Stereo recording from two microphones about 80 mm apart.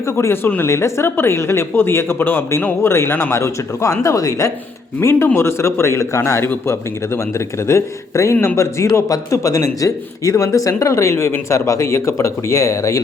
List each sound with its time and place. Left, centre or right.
0.0 s speech: left
4.9 s speech: left
8.9 s speech: left